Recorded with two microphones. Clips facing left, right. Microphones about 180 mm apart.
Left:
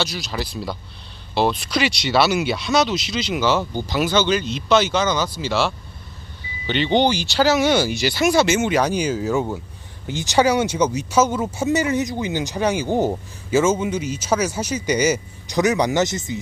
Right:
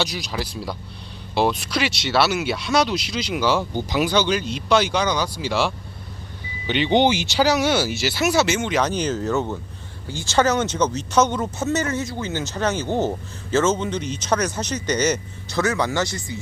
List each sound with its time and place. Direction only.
0.0 s speech: 10° right (ahead or behind)
3.6 s speech: 10° left (ahead or behind)
4.0 s speech: 10° right (ahead or behind)
7.5 s speech: 5° right (ahead or behind)
8.5 s speech: 5° left (ahead or behind)